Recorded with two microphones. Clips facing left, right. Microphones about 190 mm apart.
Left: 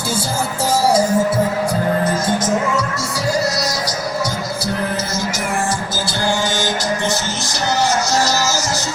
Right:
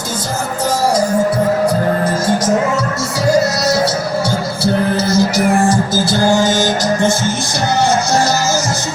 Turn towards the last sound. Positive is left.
turn(degrees=-45)  # may be behind; listen again after turning